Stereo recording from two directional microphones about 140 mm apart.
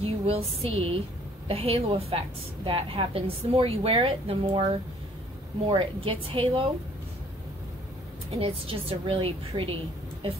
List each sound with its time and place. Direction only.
0.0 s a sound: 45° right (ahead or behind)
2.6 s a woman's voice: 40° right (ahead or behind)
8.4 s a woman's voice: 40° right (ahead or behind)